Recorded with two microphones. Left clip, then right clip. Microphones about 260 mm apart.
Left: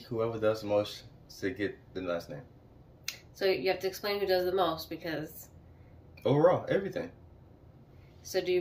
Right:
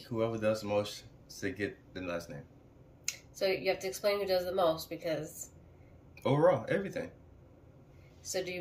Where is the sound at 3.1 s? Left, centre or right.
Centre.